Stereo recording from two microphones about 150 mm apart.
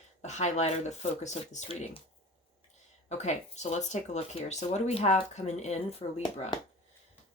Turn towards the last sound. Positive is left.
turn(degrees=45)  # may be behind; listen again after turning